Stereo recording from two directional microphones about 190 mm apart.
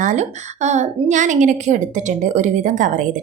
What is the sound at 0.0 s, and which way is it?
A woman's voice, 40° right (ahead or behind).